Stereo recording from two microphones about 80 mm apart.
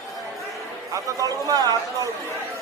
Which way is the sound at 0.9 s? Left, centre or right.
Right.